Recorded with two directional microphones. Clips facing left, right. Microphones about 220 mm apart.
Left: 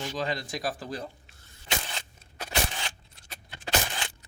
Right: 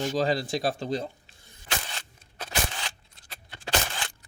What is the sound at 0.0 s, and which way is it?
Speech, 40° right (ahead or behind).